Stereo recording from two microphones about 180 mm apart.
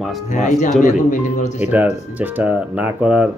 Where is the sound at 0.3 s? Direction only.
45° left (ahead or behind).